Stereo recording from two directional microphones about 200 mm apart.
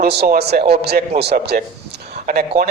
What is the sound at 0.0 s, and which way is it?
A man's voice, 50° right (ahead or behind).